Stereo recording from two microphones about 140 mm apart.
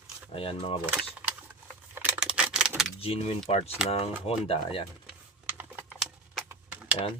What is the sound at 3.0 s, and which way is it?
Speech, 45° left (ahead or behind).